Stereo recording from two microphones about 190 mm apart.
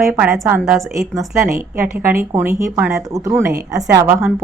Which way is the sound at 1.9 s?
10° right (ahead or behind).